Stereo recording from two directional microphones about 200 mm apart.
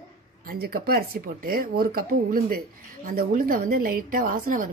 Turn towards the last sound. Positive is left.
turn(degrees=-45)  # may be behind; listen again after turning